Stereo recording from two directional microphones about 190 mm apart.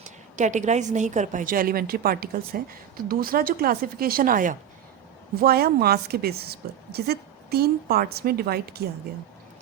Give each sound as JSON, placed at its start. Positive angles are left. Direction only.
{"t": 0.0, "sound": "a woman's voice", "side_deg": -40}